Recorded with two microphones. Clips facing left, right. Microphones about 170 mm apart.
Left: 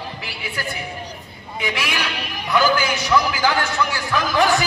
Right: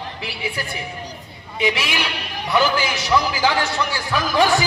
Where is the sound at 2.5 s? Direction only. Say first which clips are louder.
Left 1 dB; 30° right (ahead or behind).